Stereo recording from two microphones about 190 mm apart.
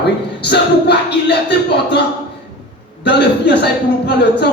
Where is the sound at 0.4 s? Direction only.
60° left (ahead or behind).